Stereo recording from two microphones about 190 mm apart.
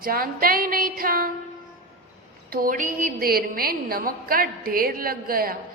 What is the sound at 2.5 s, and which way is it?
A woman's voice, 50° right (ahead or behind).